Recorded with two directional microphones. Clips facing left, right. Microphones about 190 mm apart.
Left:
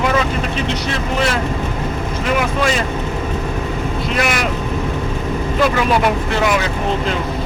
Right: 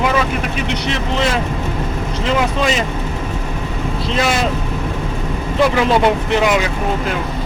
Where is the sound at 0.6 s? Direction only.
15° right (ahead or behind).